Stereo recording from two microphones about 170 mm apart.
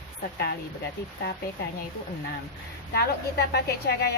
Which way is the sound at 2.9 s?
70° left (ahead or behind).